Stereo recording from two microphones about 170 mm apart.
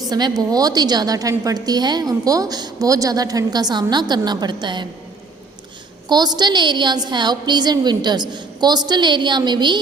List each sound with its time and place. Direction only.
0.1 s a woman's voice: 25° right (ahead or behind)
6.1 s a woman's voice: 25° right (ahead or behind)